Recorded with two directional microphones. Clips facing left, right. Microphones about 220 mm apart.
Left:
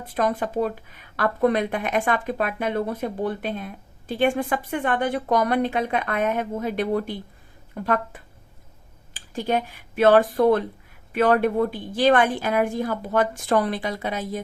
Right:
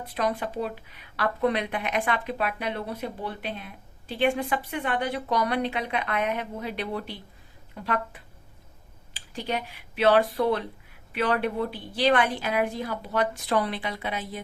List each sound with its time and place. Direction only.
0.0 s speech: 50° left (ahead or behind)